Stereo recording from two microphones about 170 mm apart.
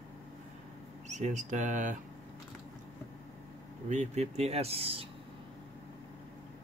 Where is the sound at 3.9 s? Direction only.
40° right (ahead or behind).